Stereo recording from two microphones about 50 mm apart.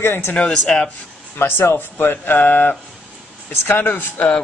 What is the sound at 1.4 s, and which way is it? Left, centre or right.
Speech, left.